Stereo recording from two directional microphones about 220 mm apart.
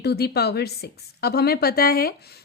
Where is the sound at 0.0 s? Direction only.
45° left (ahead or behind).